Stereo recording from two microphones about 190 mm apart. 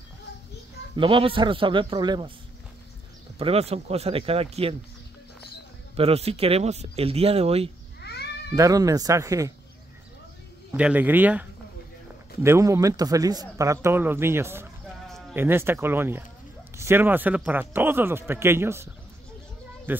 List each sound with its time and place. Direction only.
0.9 s a man's voice: 25° right (ahead or behind)
3.3 s speech: 30° right (ahead or behind)
5.9 s speech: 30° right (ahead or behind)
8.0 s cat: 60° left (ahead or behind)
8.5 s speech: 20° right (ahead or behind)
10.7 s speech: 10° right (ahead or behind)
12.4 s speech: 15° right (ahead or behind)
19.9 s speech: 10° right (ahead or behind)